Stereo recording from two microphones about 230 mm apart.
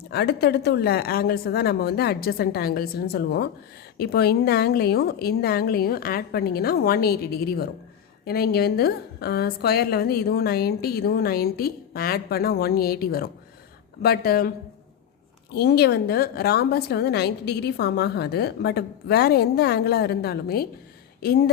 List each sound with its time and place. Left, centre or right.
0.1 s a woman's voice: left
15.5 s a woman's voice: left